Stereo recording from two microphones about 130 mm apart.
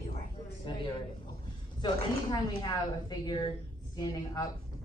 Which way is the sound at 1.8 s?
35° left (ahead or behind).